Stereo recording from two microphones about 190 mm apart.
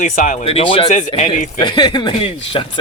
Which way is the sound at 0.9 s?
40° left (ahead or behind).